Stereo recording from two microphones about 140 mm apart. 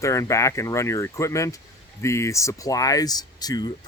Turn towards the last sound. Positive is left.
turn(degrees=30)  # may be behind; listen again after turning